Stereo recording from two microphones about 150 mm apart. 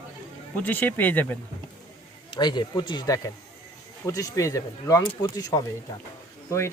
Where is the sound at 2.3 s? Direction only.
30° left (ahead or behind).